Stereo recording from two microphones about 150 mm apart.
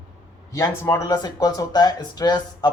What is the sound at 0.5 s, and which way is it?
Speech, 20° left (ahead or behind).